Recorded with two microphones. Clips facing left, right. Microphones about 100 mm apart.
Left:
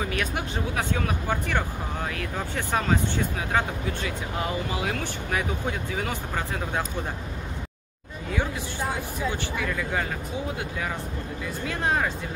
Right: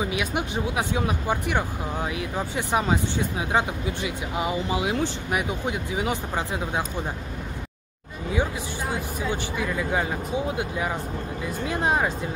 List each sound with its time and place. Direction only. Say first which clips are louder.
0.0 s speech: right 2 dB; 15° right (ahead or behind)
9.6 s speech: right 3 dB; 15° right (ahead or behind)
11.6 s speech: right 2 dB; 20° right (ahead or behind)